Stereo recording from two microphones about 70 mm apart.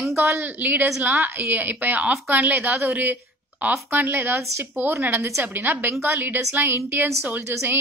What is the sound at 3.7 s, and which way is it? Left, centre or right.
A woman's voice, right.